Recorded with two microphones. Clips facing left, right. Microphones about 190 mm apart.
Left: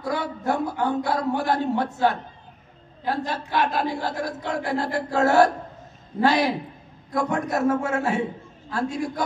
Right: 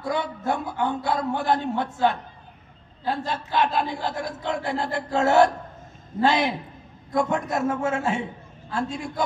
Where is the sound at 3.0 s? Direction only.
20° right (ahead or behind).